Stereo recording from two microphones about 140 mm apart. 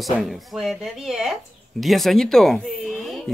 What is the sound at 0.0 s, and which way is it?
Speech, centre (ahead or behind).